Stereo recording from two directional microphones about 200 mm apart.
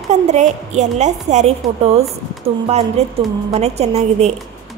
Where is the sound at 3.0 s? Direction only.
35° right (ahead or behind).